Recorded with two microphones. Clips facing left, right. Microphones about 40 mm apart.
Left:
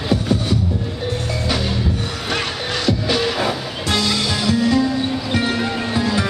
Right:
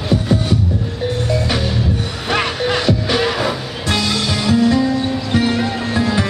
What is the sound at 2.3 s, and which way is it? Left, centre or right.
Music, centre.